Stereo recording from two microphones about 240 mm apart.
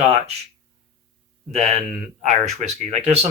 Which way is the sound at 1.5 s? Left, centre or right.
Right.